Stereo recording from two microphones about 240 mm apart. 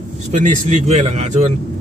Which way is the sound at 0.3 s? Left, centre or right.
Right.